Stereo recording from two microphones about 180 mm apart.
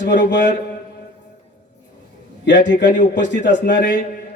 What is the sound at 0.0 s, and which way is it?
Mantra, 80° left.